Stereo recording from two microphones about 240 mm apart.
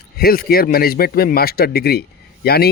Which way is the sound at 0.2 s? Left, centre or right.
Left.